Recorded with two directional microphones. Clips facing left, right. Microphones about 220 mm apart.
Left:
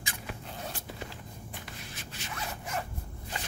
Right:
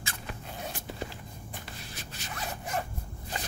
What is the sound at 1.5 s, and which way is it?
Zipper, 35° right (ahead or behind).